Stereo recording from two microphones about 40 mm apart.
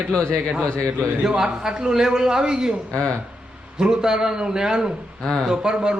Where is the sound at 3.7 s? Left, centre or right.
Centre.